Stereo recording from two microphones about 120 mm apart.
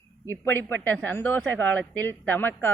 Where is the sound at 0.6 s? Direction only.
15° left (ahead or behind).